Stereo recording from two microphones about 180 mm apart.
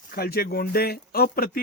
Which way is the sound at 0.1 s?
55° left (ahead or behind).